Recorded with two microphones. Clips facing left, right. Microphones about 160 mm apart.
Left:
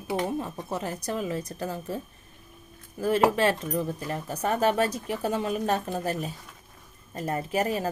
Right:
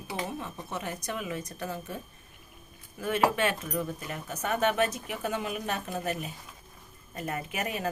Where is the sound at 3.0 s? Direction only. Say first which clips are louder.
Left 4 dB; 35° left (ahead or behind).